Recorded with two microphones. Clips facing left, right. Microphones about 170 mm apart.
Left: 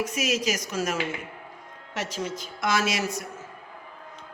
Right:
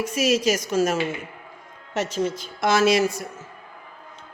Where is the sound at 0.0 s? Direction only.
30° right (ahead or behind).